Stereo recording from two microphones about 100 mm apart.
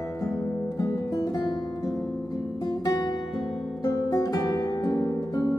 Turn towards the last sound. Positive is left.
turn(degrees=40)  # may be behind; listen again after turning